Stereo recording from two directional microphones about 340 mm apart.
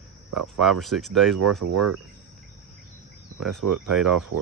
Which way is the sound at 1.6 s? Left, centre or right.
Right.